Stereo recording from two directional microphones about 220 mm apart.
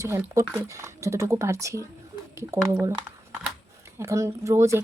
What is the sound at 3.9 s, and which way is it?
Speech, 15° right (ahead or behind).